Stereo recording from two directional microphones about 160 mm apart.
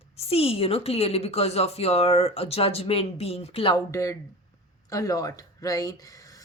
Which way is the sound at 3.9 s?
20° left (ahead or behind).